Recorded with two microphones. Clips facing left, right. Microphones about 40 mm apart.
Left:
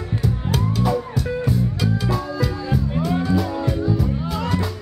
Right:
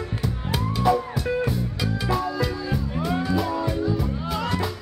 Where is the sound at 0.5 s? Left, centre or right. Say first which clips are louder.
Right 1 dB; centre.